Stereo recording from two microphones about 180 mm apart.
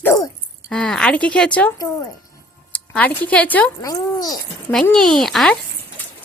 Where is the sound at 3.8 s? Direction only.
20° left (ahead or behind).